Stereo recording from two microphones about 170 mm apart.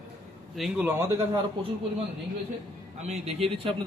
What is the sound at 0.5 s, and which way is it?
Speech, centre (ahead or behind).